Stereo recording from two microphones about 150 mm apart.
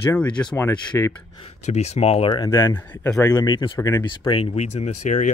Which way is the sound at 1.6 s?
45° left (ahead or behind).